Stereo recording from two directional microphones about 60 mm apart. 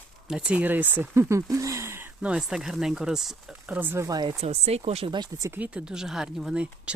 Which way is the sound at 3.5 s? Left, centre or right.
Right.